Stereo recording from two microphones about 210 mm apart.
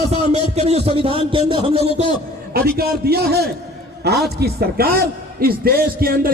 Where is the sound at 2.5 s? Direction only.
45° right (ahead or behind).